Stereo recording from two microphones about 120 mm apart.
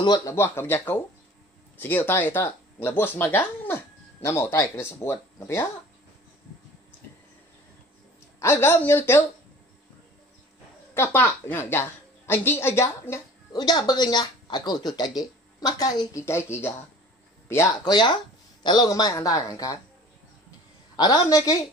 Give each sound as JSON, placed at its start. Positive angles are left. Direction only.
{"t": 0.0, "sound": "speech", "side_deg": 35}
{"t": 0.3, "sound": "speech", "side_deg": 20}
{"t": 8.4, "sound": "speech", "side_deg": 20}
{"t": 11.0, "sound": "a woman's voice", "side_deg": 15}
{"t": 13.6, "sound": "speech", "side_deg": 35}
{"t": 17.8, "sound": "speech", "side_deg": 40}
{"t": 20.9, "sound": "speech", "side_deg": 35}